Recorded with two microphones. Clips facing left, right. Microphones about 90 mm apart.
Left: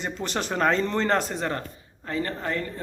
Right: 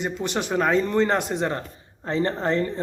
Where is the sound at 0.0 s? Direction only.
15° right (ahead or behind).